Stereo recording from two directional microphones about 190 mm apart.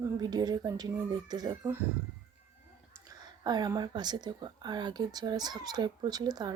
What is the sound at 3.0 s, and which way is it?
Speech, 20° right (ahead or behind).